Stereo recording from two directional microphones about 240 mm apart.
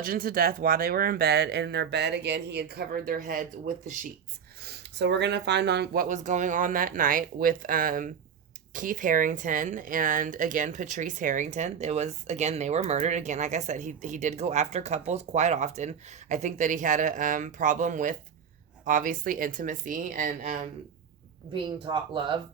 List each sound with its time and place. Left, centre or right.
0.0 s speech: right
4.6 s speech: right
21.5 s speech: right